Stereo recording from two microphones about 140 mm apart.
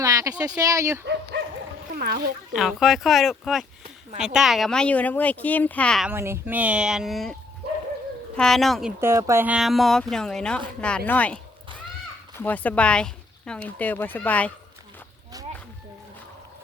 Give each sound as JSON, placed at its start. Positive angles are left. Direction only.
{"t": 0.0, "sound": "a sound", "side_deg": -25}
{"t": 0.6, "sound": "speech", "side_deg": -25}
{"t": 1.9, "sound": "speech", "side_deg": -90}
{"t": 2.5, "sound": "speech", "side_deg": 0}
{"t": 6.1, "sound": "speech", "side_deg": -15}
{"t": 8.4, "sound": "speech", "side_deg": 0}
{"t": 9.0, "sound": "speech", "side_deg": -20}
{"t": 9.6, "sound": "speech", "side_deg": 0}
{"t": 12.4, "sound": "speech", "side_deg": 10}